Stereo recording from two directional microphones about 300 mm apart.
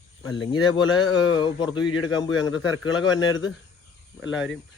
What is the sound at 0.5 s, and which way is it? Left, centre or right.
Speech, centre.